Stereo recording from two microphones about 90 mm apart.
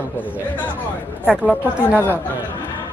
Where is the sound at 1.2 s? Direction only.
10° right (ahead or behind).